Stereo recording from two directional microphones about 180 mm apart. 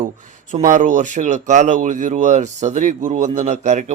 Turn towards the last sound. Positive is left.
turn(degrees=-40)  # may be behind; listen again after turning